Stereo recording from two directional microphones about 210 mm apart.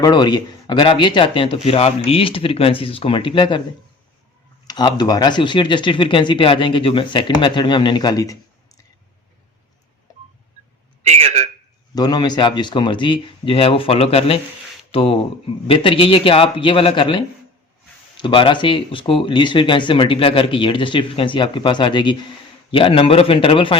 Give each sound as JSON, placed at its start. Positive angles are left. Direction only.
{"t": 0.0, "sound": "speech", "side_deg": 20}
{"t": 4.6, "sound": "speech", "side_deg": 20}
{"t": 11.0, "sound": "a man's voice", "side_deg": -30}
{"t": 11.9, "sound": "speech", "side_deg": 20}